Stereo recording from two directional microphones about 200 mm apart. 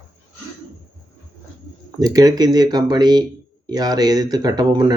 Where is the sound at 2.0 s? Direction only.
20° right (ahead or behind).